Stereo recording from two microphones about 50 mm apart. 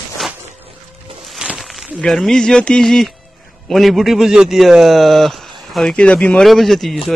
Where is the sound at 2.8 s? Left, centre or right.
Centre.